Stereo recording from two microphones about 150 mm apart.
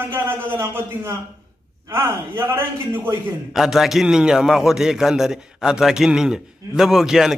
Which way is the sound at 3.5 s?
5° right (ahead or behind).